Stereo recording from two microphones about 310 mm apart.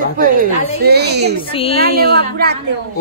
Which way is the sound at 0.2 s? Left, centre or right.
Right.